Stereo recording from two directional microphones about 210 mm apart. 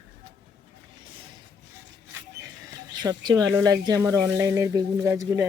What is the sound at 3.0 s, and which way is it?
Speech, 20° right (ahead or behind).